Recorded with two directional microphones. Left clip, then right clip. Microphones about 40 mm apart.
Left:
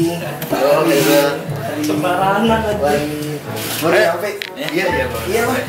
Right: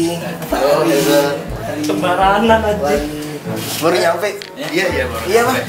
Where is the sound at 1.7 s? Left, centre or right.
Centre.